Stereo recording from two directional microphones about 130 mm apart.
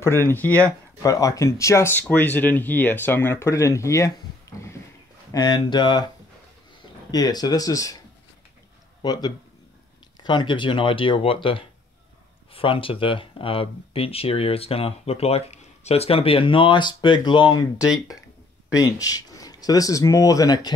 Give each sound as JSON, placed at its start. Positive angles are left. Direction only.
{"t": 0.0, "sound": "speech", "side_deg": 20}
{"t": 1.0, "sound": "speech", "side_deg": 25}
{"t": 7.1, "sound": "speech", "side_deg": 30}
{"t": 9.0, "sound": "speech", "side_deg": 30}
{"t": 17.7, "sound": "speech", "side_deg": -5}
{"t": 18.7, "sound": "speech", "side_deg": 25}